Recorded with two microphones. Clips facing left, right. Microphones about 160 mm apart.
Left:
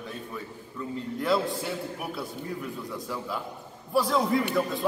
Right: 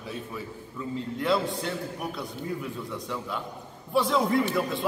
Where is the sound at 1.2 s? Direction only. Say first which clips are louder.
Even; centre (ahead or behind).